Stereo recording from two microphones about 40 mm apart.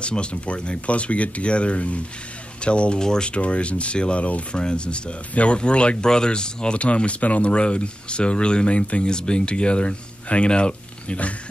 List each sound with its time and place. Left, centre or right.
0.0 s speech: left
3.3 s speech: left
4.6 s speech: left